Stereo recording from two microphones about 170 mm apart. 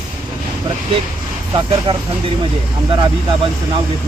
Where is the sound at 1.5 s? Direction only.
30° right (ahead or behind).